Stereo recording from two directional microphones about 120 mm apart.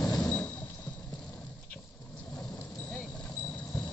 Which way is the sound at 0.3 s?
15° left (ahead or behind).